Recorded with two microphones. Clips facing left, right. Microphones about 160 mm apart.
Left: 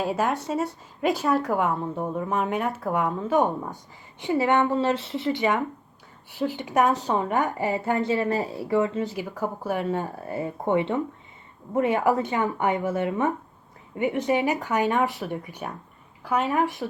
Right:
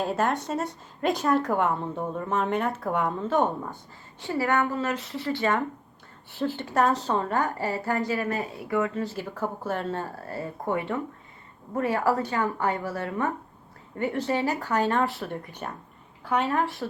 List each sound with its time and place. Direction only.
0.0 s speech: 5° left (ahead or behind)
4.2 s speech: 20° left (ahead or behind); by 16.5 s 5° left (ahead or behind)
16.5 s speech: 15° left (ahead or behind)